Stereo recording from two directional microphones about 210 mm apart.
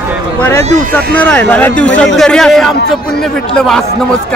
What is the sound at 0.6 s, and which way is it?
Speech, 35° right (ahead or behind).